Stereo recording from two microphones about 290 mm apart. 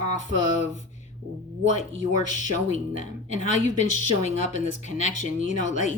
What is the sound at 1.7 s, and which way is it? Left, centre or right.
Speech, left.